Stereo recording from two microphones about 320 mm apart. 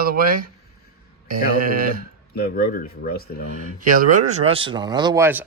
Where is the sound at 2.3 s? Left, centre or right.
Left.